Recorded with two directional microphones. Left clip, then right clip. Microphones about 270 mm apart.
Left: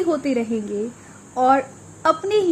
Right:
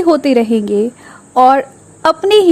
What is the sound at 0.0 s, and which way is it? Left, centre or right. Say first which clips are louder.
A woman's voice: right 10 dB; right.